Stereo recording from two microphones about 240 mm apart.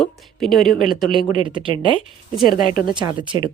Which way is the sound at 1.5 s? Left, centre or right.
Right.